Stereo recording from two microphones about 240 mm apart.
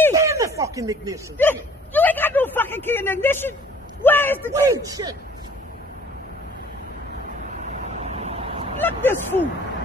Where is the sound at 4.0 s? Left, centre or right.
Centre.